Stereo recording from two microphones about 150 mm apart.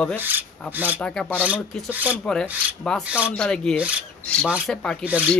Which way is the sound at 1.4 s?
10° right (ahead or behind).